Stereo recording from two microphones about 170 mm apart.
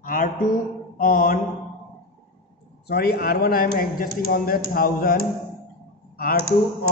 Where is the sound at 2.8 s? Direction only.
70° left (ahead or behind).